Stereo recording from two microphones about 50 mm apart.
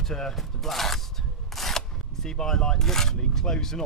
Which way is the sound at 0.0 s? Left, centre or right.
Centre.